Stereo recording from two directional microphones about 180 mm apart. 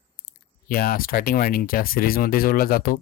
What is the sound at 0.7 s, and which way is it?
Speech, 55° left (ahead or behind).